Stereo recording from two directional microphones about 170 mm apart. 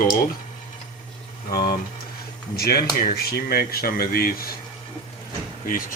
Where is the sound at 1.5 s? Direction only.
60° left (ahead or behind).